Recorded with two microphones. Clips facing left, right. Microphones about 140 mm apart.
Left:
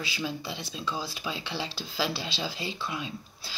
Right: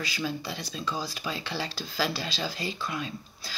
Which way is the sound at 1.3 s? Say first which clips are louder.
Right 1 dB; 45° right (ahead or behind).